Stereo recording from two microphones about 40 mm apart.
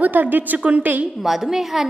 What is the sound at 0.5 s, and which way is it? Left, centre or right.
Speech, right.